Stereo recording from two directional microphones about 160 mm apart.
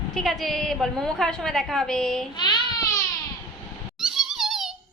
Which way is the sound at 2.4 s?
25° left (ahead or behind).